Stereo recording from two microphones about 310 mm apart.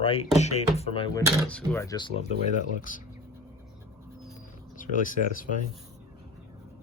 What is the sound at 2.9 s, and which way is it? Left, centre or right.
Speech, left.